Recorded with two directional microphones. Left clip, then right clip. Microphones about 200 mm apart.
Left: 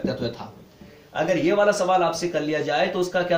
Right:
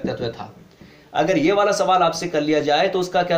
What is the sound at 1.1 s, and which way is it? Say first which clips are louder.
Speech: right 3 dB; 40° right (ahead or behind).